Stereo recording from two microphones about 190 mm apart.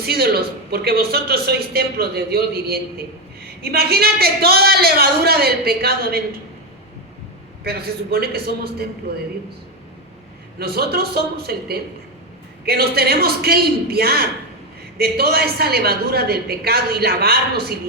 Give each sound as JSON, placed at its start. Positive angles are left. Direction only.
{"t": 0.0, "sound": "a woman's voice", "side_deg": -55}
{"t": 7.6, "sound": "a woman's voice", "side_deg": -55}
{"t": 10.6, "sound": "a woman's voice", "side_deg": -55}